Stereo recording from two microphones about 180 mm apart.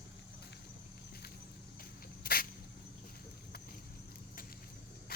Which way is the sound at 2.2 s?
55° left (ahead or behind).